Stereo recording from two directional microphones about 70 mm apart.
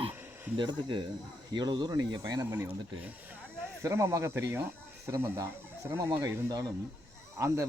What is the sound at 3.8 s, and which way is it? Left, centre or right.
Speech, right.